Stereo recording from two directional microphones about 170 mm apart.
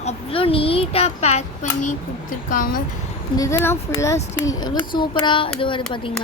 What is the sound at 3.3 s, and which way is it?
Speech, 20° left (ahead or behind).